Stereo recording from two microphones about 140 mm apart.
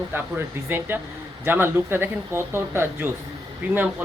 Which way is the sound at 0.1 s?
15° right (ahead or behind).